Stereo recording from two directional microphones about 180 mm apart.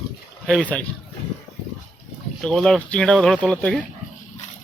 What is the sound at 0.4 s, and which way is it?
Speech, centre (ahead or behind).